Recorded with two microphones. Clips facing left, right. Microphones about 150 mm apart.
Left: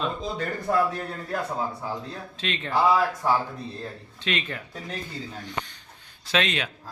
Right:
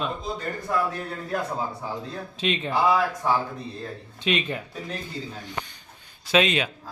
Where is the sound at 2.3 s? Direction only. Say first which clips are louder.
Right 6 dB; 15° right (ahead or behind).